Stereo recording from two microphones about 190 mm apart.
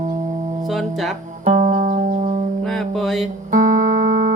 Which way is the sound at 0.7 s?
Centre (ahead or behind).